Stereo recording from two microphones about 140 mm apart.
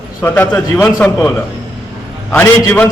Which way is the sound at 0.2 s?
15° left (ahead or behind).